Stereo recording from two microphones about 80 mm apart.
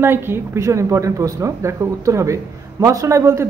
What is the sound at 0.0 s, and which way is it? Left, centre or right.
A woman's voice, right.